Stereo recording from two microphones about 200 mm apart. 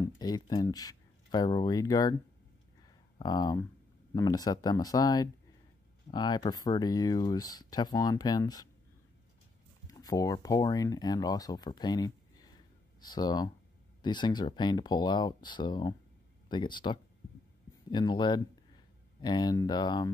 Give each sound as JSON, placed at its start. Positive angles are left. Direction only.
{"t": 0.0, "sound": "speech", "side_deg": 20}
{"t": 3.2, "sound": "speech", "side_deg": 20}
{"t": 9.8, "sound": "speech", "side_deg": 15}